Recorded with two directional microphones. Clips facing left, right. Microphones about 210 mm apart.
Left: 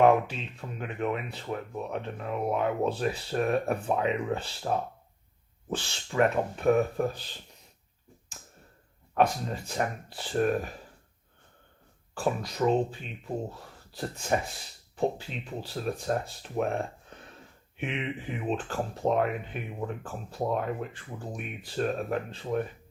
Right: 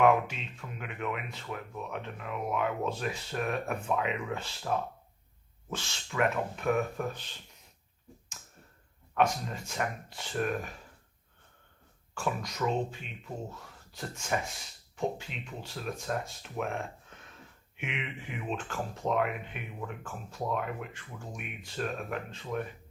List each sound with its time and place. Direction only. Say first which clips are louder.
0.0 s speech: left 3 dB; 35° left (ahead or behind)
8.4 s tick-tock: left 4 dB; 35° left (ahead or behind)
9.1 s speech: left 3 dB; 35° left (ahead or behind)
12.1 s speech: left 4 dB; 35° left (ahead or behind)